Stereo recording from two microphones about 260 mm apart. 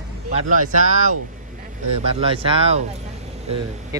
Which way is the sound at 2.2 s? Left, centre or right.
Right.